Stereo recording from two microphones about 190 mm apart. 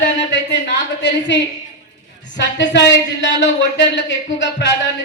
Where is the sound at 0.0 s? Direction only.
70° left (ahead or behind).